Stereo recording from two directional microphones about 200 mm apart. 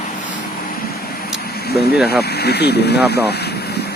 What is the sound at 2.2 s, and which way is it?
Speech, 55° left (ahead or behind).